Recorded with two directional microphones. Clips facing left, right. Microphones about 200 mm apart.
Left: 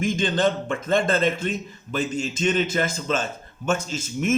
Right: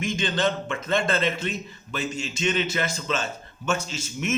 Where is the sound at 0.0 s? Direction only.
45° left (ahead or behind).